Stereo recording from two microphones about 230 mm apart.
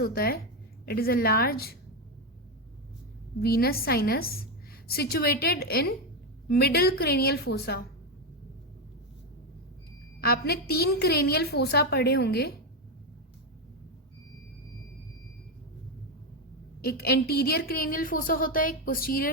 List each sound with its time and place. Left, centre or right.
0.0 s a woman's voice: left
3.4 s a woman's voice: left
10.2 s a woman's voice: left
16.8 s a woman's voice: left